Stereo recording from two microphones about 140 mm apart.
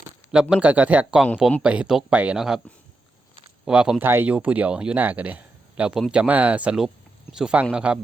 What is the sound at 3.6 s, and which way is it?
Speech, 5° right (ahead or behind).